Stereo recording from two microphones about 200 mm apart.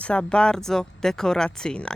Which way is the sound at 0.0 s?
5° left (ahead or behind).